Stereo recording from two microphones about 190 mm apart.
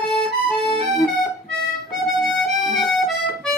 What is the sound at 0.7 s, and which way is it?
Accordion, 20° left (ahead or behind).